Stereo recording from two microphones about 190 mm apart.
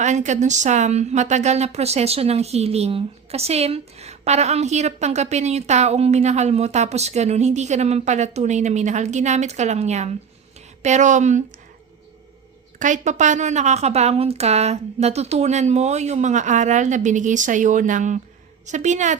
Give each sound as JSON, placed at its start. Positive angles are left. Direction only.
{"t": 0.0, "sound": "speech", "side_deg": -40}
{"t": 12.8, "sound": "speech", "side_deg": -40}